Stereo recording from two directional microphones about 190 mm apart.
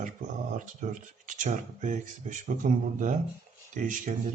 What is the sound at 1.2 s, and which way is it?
Speech, 40° right (ahead or behind).